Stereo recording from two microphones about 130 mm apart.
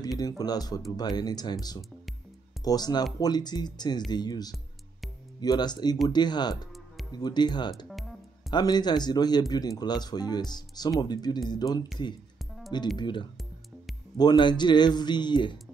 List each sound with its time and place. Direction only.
0.2 s speech: 30° left (ahead or behind)
12.9 s speech: 35° left (ahead or behind)